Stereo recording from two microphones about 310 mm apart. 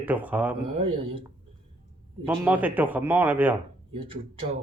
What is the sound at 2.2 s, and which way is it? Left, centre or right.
Speech, centre.